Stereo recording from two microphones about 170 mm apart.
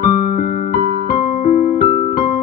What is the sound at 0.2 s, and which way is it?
Music, 50° left (ahead or behind).